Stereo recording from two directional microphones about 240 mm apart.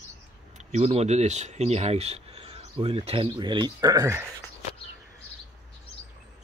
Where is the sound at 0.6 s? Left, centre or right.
Right; by 4.3 s centre.